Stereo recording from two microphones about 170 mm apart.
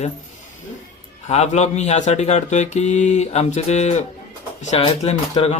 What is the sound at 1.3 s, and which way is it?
Speech, 40° left (ahead or behind).